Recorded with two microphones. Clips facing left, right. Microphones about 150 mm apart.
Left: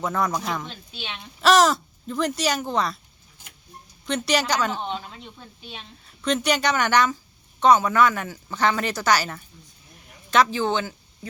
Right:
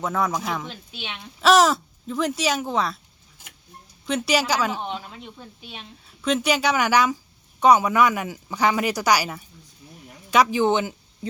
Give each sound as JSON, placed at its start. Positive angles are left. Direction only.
{"t": 0.0, "sound": "speech", "side_deg": -5}
{"t": 4.0, "sound": "a woman's voice", "side_deg": -5}